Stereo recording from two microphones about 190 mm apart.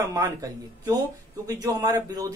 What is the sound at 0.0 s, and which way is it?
Speech, 15° right (ahead or behind).